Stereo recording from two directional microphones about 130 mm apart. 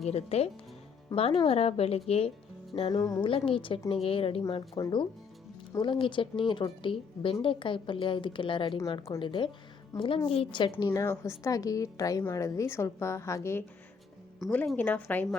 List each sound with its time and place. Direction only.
0.0 s a woman's voice: 55° left (ahead or behind)
2.9 s a woman's voice: 30° left (ahead or behind)
3.2 s a woman's voice: 45° left (ahead or behind)
9.9 s a woman's voice: 25° left (ahead or behind)
10.2 s a woman's voice: 45° left (ahead or behind); by 13.7 s 20° left (ahead or behind)
14.4 s speech: centre (ahead or behind)
14.8 s a woman's voice: 10° left (ahead or behind)